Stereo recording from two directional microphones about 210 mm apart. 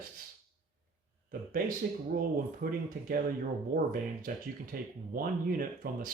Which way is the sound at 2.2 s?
40° right (ahead or behind).